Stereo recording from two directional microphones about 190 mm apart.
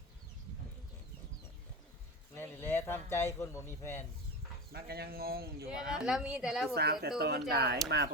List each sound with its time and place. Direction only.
2.3 s a man's voice: 10° left (ahead or behind)
4.7 s a man's voice: 55° right (ahead or behind)
5.9 s a woman's voice: 5° right (ahead or behind)
6.7 s a man's voice: 55° right (ahead or behind)